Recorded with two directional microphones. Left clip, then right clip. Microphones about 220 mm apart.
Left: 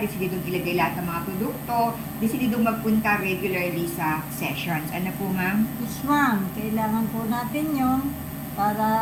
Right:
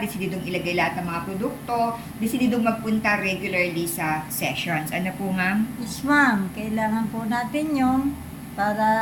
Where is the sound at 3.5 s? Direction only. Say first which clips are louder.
Right 3 dB; 35° right (ahead or behind).